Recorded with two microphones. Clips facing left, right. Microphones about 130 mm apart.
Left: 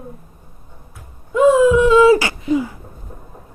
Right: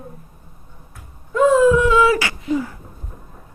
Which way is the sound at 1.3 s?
15° left (ahead or behind).